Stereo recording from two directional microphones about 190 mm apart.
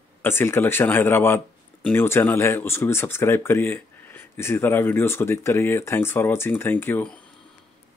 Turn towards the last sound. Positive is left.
turn(degrees=10)  # may be behind; listen again after turning